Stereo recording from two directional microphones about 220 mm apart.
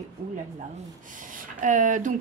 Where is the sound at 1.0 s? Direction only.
35° right (ahead or behind).